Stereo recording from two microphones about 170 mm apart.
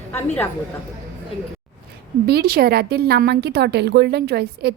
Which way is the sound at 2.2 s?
65° right (ahead or behind).